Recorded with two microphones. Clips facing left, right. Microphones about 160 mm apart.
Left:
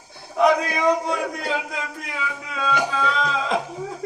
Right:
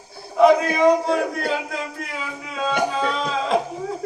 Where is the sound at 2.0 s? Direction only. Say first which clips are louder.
Left 1 dB; 5° right (ahead or behind).